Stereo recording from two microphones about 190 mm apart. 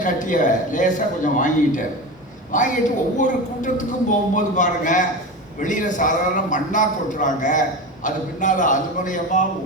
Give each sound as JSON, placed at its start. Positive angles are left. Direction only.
{"t": 0.0, "sound": "a man's voice", "side_deg": 40}